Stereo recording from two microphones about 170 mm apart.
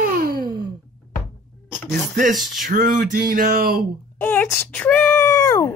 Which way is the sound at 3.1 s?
60° right (ahead or behind).